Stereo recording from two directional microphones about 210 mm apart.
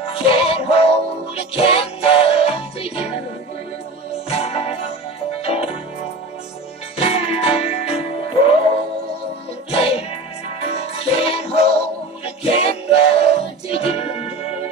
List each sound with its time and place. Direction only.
0.0 s music: 25° left (ahead or behind)
4.3 s music: 30° left (ahead or behind)
7.0 s music: 25° left (ahead or behind)
9.7 s music: 25° left (ahead or behind)